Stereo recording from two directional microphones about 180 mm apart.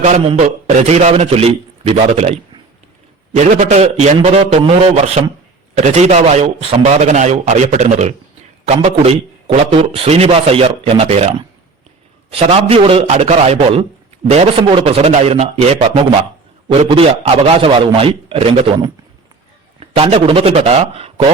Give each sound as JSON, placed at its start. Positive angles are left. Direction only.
{"t": 0.0, "sound": "a man's voice", "side_deg": -40}
{"t": 20.0, "sound": "a man's voice", "side_deg": -30}